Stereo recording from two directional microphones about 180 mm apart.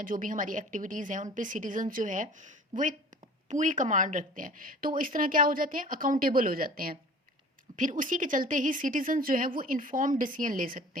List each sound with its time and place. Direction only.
0.0 s a woman's voice: 50° right (ahead or behind)